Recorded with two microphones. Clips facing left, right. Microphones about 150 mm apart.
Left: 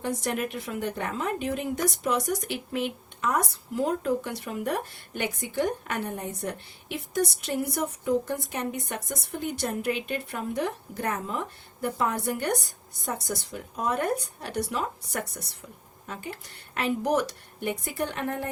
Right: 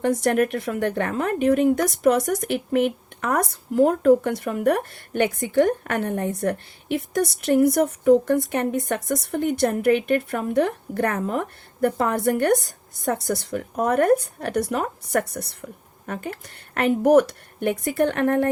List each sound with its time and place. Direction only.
0.0 s speech: 60° right (ahead or behind)